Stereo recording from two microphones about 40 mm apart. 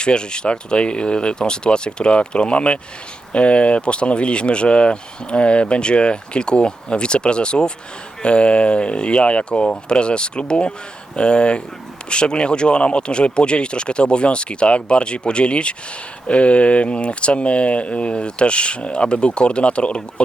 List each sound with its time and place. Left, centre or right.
0.0 s speech: left